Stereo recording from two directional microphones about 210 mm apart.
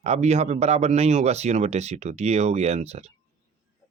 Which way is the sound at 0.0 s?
30° right (ahead or behind).